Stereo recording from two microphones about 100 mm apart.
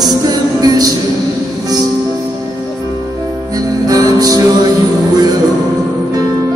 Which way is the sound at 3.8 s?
40° right (ahead or behind).